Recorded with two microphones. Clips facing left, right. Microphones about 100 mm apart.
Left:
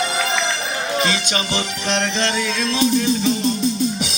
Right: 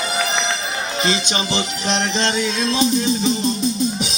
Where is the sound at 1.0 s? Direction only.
25° right (ahead or behind).